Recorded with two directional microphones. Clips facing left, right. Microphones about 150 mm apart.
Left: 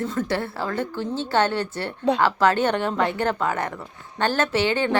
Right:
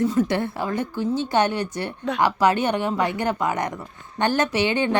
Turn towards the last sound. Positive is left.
turn(degrees=-15)  # may be behind; listen again after turning